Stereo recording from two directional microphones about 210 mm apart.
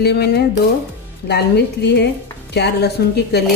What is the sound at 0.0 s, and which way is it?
Speech, 50° left (ahead or behind).